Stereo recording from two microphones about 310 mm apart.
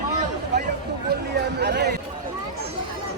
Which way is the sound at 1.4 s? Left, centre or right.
Right.